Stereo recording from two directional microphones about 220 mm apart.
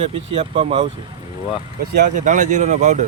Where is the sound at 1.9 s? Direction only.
35° right (ahead or behind).